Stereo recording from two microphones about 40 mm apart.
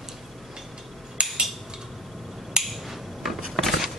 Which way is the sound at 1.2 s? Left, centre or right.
Right.